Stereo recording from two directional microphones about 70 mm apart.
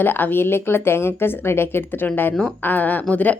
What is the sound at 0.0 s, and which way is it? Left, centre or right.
A woman's voice, left.